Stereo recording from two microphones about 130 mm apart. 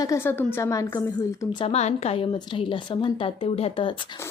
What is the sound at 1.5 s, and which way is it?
Speech, 40° left (ahead or behind).